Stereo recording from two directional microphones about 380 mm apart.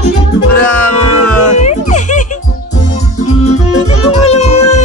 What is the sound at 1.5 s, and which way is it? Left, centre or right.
Music, centre.